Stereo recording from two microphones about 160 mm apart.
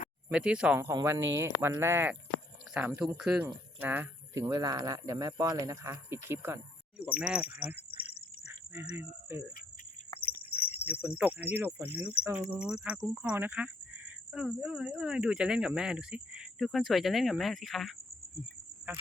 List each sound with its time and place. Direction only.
0.3 s speech: 5° right (ahead or behind)
4.4 s speech: 25° right (ahead or behind)
10.2 s a sound: 75° left (ahead or behind)
11.2 s speech: 10° right (ahead or behind)